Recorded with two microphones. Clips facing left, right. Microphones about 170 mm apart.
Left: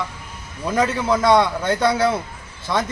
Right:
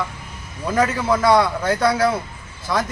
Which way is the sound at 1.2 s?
20° left (ahead or behind).